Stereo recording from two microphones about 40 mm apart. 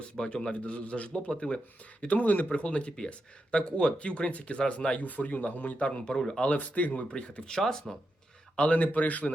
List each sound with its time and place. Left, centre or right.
0.2 s speech: left
2.1 s speech: left
2.5 s speech: left
4.9 s speech: left
5.8 s speech: left
6.1 s speech: centre
6.6 s speech: left
7.1 s speech: left
8.5 s speech: left